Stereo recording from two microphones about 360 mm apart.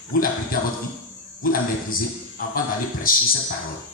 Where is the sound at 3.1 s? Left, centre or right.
Left.